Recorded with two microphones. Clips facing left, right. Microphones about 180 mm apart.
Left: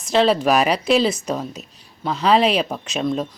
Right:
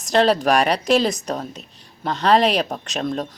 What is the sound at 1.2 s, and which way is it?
Speech, 5° left (ahead or behind).